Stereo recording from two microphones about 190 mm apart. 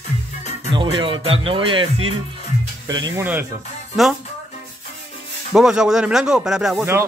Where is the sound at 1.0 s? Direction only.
30° right (ahead or behind).